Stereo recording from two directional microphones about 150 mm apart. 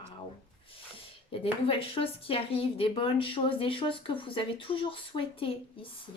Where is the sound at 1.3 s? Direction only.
35° left (ahead or behind).